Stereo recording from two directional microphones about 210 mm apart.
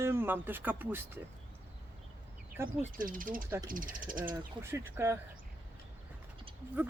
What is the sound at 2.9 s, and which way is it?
Speech, 40° right (ahead or behind).